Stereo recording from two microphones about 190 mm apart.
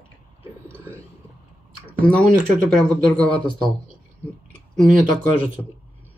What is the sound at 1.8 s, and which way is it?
Speech, 5° left (ahead or behind).